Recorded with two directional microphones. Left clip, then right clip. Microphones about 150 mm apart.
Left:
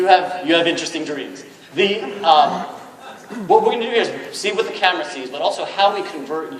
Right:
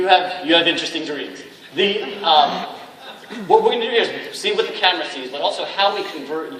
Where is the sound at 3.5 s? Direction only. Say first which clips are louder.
Even; 40° right (ahead or behind).